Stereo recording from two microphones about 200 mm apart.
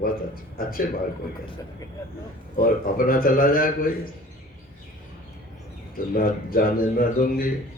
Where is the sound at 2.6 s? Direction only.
45° left (ahead or behind).